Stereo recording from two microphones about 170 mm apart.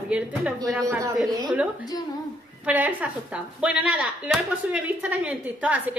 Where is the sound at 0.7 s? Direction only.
20° right (ahead or behind).